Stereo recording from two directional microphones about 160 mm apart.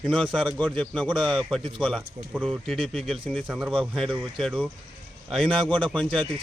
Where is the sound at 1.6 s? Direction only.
30° right (ahead or behind).